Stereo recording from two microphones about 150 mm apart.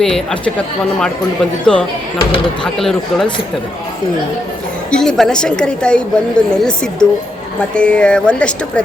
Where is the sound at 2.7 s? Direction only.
Centre (ahead or behind).